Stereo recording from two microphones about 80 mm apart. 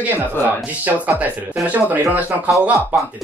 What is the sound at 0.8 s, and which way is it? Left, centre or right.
Speech, centre.